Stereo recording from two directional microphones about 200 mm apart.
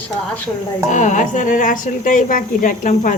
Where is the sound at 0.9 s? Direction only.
40° left (ahead or behind).